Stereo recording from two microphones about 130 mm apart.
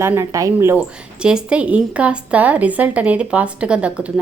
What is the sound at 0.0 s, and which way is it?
Speech, 25° right (ahead or behind).